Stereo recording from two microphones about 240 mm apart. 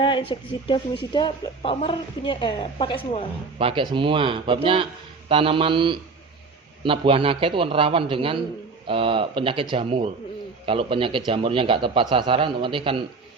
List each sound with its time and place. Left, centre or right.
0.0 s a woman's voice: left
3.6 s speech: right